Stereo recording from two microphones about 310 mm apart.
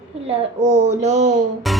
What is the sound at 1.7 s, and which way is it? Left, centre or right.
Music, centre.